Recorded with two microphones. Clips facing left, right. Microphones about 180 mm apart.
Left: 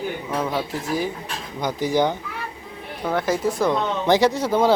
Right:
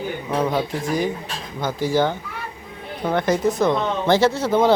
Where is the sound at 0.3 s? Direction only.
15° right (ahead or behind).